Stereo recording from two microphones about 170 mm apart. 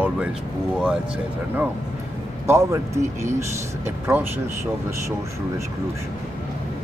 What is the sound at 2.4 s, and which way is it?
Speech, 15° right (ahead or behind).